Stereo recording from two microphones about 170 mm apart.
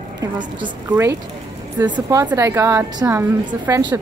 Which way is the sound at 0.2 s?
25° right (ahead or behind).